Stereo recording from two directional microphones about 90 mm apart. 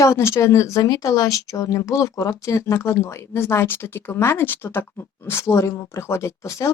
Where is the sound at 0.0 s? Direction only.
30° left (ahead or behind).